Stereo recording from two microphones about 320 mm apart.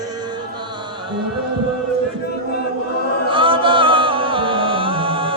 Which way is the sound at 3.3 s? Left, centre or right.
Centre.